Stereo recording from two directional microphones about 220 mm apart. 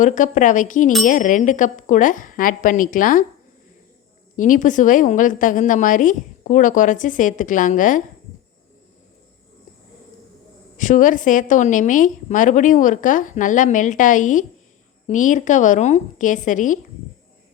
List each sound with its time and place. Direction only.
0.0 s a woman's voice: 35° left (ahead or behind)
4.4 s a woman's voice: 35° left (ahead or behind)
10.8 s a woman's voice: 35° left (ahead or behind)